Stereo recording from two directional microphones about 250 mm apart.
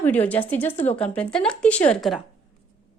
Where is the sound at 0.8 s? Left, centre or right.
Left.